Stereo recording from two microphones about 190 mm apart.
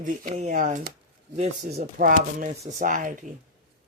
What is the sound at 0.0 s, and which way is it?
Speech, 40° right (ahead or behind).